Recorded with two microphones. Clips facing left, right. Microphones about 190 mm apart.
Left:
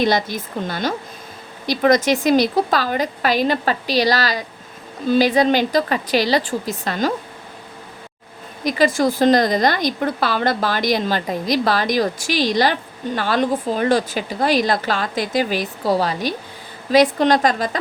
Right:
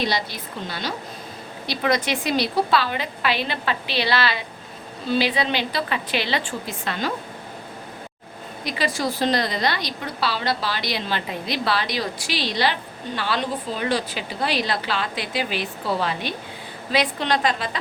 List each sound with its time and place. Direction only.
0.0 s a woman's voice: 50° left (ahead or behind)
8.6 s a woman's voice: 45° left (ahead or behind)